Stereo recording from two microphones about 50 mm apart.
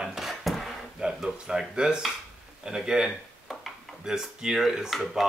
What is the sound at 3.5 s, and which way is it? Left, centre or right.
Dishes, centre.